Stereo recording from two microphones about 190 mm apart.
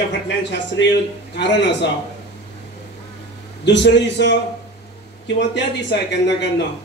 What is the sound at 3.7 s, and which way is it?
A man's voice, 65° left (ahead or behind).